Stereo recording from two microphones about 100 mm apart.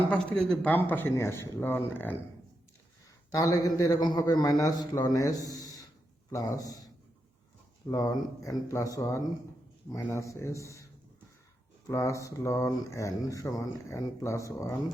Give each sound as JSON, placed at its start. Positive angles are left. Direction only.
{"t": 0.3, "sound": "speech", "side_deg": 15}
{"t": 3.3, "sound": "a man's voice", "side_deg": 40}
{"t": 11.9, "sound": "a man's voice", "side_deg": 30}